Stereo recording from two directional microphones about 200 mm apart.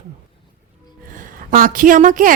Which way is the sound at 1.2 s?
45° right (ahead or behind).